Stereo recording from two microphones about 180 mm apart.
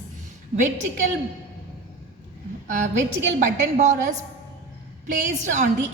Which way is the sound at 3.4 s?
40° right (ahead or behind).